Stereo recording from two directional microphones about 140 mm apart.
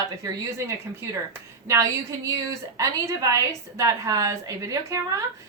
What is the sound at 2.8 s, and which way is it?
A woman's voice, 25° right (ahead or behind).